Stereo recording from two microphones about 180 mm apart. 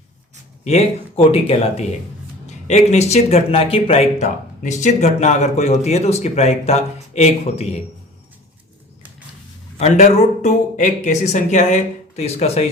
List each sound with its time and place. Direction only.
0.6 s speech: 35° left (ahead or behind)
9.7 s speech: 35° left (ahead or behind)